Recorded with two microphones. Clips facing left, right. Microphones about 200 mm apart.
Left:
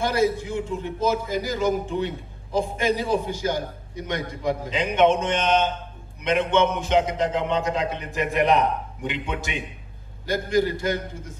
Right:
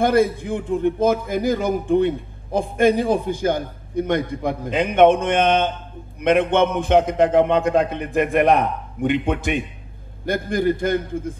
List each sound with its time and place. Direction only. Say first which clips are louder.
0.0 s a man's voice: right 5 dB; 55° right (ahead or behind)